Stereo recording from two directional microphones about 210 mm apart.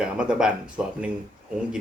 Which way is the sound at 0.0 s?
5° right (ahead or behind).